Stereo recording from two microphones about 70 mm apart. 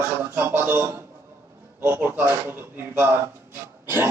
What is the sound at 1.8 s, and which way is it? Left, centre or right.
A man's voice, right.